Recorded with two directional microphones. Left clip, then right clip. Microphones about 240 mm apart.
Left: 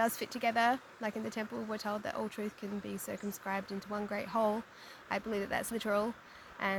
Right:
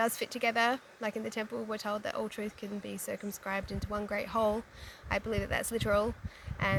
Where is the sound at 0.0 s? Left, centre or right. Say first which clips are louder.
Right 2 dB; centre.